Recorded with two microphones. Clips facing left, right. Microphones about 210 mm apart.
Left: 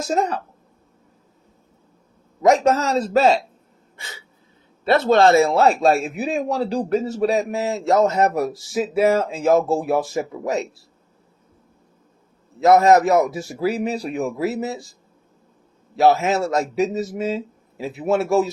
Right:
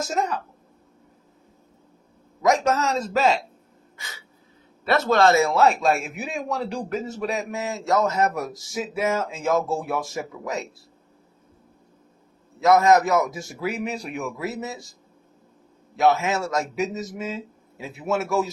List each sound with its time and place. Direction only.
0.0 s a man's voice: 35° left (ahead or behind)
2.6 s a man's voice: 35° left (ahead or behind)
4.9 s a man's voice: 25° left (ahead or behind)
12.5 s a man's voice: 30° left (ahead or behind)
16.0 s a man's voice: 30° left (ahead or behind)